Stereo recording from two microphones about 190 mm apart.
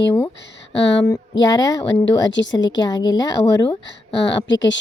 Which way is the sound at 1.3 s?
20° left (ahead or behind).